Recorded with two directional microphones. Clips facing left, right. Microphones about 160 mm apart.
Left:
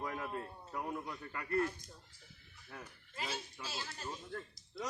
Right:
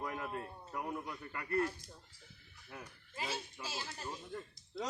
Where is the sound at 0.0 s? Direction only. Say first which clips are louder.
Even; 5° right (ahead or behind).